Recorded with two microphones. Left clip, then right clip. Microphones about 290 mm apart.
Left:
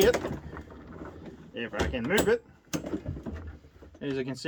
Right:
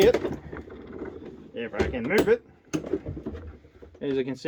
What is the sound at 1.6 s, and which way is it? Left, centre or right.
Speech, left.